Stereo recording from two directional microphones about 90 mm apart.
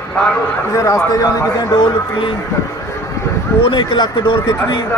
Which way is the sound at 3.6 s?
60° left (ahead or behind).